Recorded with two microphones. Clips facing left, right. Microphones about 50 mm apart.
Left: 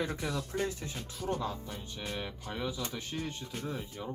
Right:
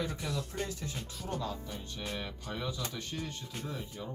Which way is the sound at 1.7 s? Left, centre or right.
Centre.